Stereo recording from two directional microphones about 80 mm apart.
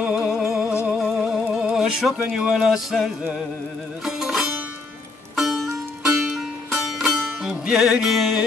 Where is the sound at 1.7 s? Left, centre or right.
Centre.